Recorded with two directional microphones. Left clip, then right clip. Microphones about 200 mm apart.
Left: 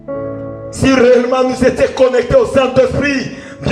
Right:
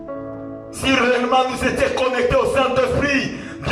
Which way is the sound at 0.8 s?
35° left (ahead or behind).